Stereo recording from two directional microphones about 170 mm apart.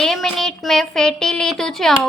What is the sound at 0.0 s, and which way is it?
Speech, centre (ahead or behind).